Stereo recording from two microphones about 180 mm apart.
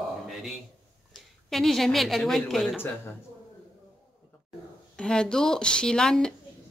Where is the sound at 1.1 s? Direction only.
Centre (ahead or behind).